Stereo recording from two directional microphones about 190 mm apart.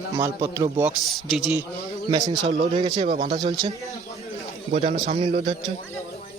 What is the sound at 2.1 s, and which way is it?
A man's voice, 20° right (ahead or behind).